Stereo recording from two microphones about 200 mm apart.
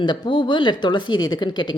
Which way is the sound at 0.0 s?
25° left (ahead or behind).